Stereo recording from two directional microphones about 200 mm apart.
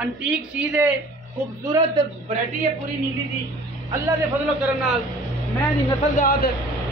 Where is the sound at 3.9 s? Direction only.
10° right (ahead or behind).